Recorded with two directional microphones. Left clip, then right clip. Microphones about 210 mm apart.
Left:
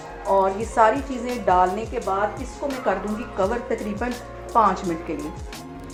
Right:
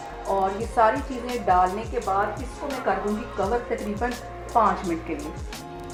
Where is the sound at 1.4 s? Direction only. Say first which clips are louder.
Left 2 dB; 30° left (ahead or behind).